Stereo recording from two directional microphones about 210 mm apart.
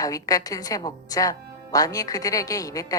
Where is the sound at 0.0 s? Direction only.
15° left (ahead or behind).